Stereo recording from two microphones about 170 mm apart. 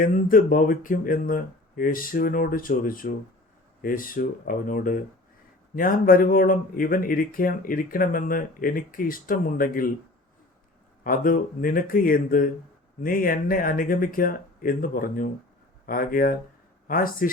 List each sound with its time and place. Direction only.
0.0 s speech: 55° left (ahead or behind)
11.0 s speech: 55° left (ahead or behind)